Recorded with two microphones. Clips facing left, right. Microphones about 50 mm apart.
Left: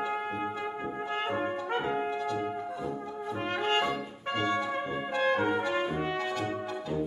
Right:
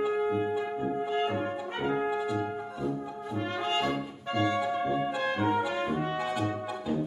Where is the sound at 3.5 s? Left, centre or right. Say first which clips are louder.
Left 2 dB; left.